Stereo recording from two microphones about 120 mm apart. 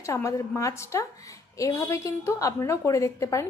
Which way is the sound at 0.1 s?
25° left (ahead or behind).